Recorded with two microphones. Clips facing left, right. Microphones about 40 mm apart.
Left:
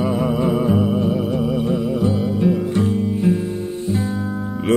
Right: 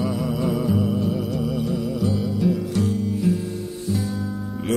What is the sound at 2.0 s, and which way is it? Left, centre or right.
Music, left.